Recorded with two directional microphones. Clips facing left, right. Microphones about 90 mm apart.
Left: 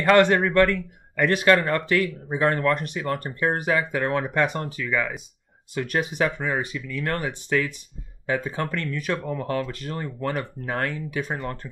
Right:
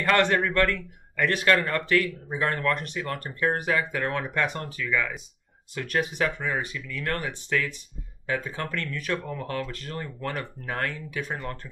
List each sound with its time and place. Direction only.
0.1 s speech: 20° left (ahead or behind)